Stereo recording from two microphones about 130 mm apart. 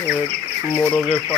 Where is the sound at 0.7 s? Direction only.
20° left (ahead or behind).